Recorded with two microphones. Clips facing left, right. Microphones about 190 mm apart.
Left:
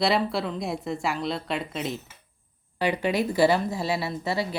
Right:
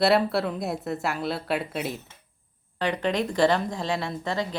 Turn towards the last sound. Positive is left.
turn(degrees=10)  # may be behind; listen again after turning